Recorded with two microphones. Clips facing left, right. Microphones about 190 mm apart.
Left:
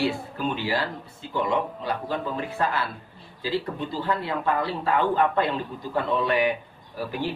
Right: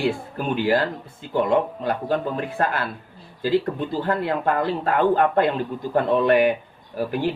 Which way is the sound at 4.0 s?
50° right (ahead or behind).